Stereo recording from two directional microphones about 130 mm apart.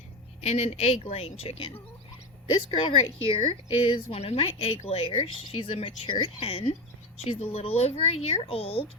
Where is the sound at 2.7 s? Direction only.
45° left (ahead or behind).